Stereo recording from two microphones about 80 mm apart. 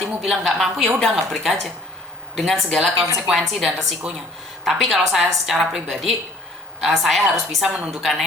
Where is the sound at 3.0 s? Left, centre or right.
Right.